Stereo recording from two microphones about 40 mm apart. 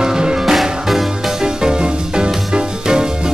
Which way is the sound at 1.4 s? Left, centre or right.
Centre.